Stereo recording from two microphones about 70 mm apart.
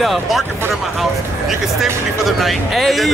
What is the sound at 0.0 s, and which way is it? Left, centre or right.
Speech, centre.